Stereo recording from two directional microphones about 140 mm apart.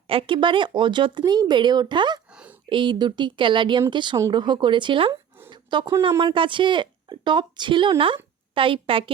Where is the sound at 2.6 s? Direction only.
35° right (ahead or behind).